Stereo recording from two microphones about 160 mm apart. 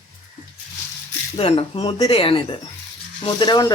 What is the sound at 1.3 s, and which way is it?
Speech, 40° left (ahead or behind).